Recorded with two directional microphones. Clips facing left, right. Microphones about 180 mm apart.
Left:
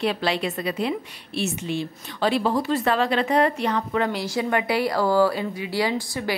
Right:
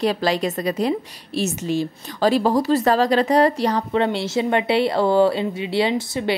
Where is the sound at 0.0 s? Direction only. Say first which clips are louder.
Right 4 dB; 40° right (ahead or behind).